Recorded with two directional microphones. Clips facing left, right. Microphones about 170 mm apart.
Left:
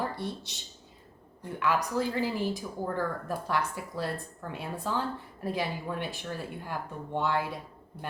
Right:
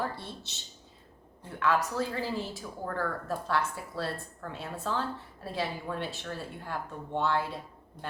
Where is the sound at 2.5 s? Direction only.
15° left (ahead or behind).